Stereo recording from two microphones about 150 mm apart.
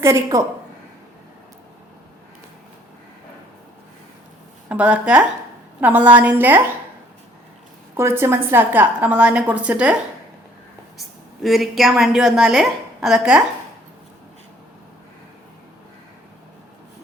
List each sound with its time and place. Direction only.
0.0 s a woman's voice: 20° right (ahead or behind)
4.7 s a woman's voice: 10° right (ahead or behind)
7.9 s a woman's voice: 15° right (ahead or behind)
11.4 s a woman's voice: centre (ahead or behind)